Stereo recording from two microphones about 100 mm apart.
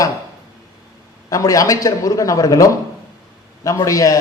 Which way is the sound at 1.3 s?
35° left (ahead or behind).